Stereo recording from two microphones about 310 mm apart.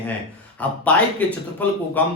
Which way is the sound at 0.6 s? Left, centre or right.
Centre.